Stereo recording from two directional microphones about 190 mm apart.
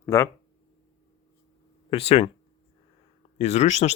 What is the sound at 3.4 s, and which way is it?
Speech, 35° left (ahead or behind).